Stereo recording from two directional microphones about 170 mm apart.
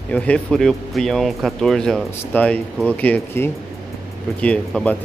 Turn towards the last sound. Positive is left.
turn(degrees=5)  # may be behind; listen again after turning